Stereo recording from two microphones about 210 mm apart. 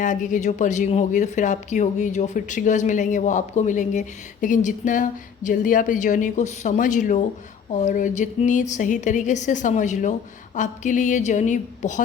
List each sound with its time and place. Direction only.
0.0 s speech: 35° left (ahead or behind)